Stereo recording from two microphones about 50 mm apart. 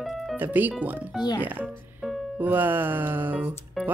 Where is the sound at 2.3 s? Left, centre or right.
Right.